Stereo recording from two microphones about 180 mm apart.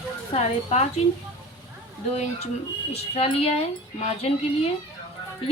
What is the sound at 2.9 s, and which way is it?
Speech, 35° left (ahead or behind).